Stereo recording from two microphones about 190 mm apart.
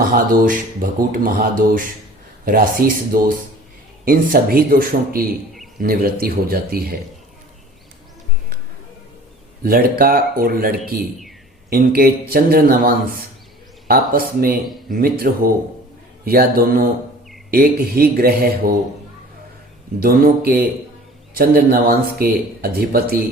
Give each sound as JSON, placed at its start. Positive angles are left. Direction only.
{"t": 0.1, "sound": "speech", "side_deg": -45}
{"t": 9.6, "sound": "speech", "side_deg": -50}
{"t": 16.2, "sound": "speech", "side_deg": -50}
{"t": 20.0, "sound": "speech", "side_deg": -50}